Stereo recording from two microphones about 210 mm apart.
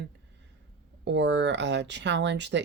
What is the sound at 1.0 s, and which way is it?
Speech, 55° right (ahead or behind).